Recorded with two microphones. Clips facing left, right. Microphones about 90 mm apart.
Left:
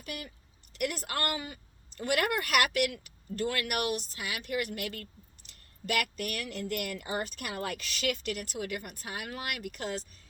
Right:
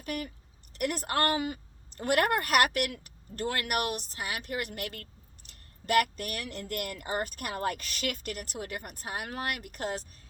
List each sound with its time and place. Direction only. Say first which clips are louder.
0.0 s a woman's voice: right 6 dB; 45° right (ahead or behind)